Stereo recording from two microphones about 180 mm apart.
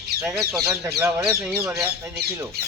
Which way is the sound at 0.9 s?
15° right (ahead or behind).